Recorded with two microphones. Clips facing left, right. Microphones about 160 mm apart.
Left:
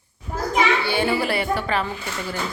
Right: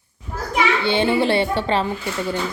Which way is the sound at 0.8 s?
20° right (ahead or behind).